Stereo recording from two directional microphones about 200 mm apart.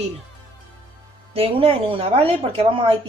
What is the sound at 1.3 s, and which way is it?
Speech, 30° right (ahead or behind).